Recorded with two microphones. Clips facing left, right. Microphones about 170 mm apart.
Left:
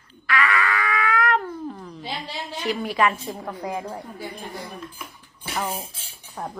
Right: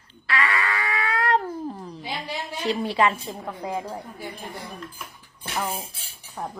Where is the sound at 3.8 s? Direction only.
10° right (ahead or behind).